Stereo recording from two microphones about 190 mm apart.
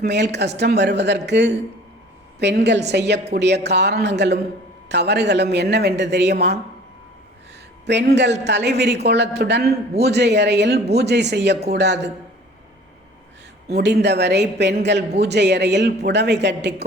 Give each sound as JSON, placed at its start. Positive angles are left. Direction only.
{"t": 0.0, "sound": "a man's voice", "side_deg": -60}
{"t": 7.9, "sound": "a man's voice", "side_deg": -65}
{"t": 13.7, "sound": "a man's voice", "side_deg": -60}